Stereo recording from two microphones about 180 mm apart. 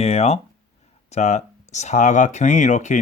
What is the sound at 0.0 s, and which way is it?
Speech, 35° left (ahead or behind).